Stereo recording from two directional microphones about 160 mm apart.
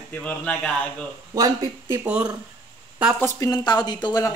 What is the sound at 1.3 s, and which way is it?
Speech, 25° right (ahead or behind).